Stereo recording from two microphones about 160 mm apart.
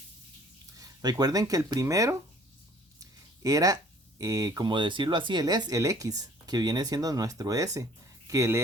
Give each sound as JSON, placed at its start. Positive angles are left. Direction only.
{"t": 0.8, "sound": "speech", "side_deg": -20}
{"t": 3.0, "sound": "a sound", "side_deg": -25}
{"t": 4.2, "sound": "speech", "side_deg": -20}